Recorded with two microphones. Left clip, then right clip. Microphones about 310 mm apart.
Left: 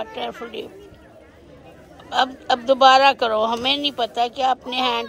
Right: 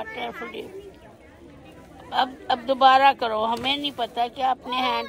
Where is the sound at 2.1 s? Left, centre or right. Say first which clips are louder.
Left 4 dB; centre.